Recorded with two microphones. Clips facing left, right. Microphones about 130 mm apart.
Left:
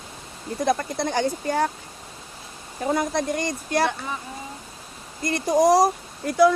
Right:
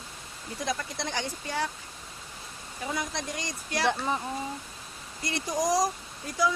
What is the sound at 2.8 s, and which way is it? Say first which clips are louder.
Speech: left 10 dB; 50° left (ahead or behind).